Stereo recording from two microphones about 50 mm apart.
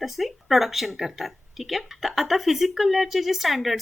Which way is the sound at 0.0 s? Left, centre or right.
Centre.